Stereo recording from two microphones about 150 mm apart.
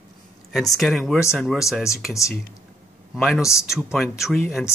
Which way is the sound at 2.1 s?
20° left (ahead or behind).